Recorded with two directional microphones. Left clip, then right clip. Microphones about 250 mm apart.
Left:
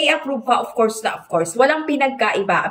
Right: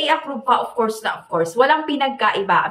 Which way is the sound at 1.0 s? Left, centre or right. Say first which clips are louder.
Left 1 dB; centre.